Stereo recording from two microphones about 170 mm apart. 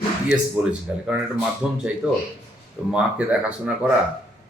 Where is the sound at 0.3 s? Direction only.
5° right (ahead or behind).